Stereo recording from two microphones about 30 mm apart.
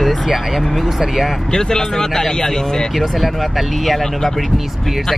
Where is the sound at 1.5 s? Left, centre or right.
Centre.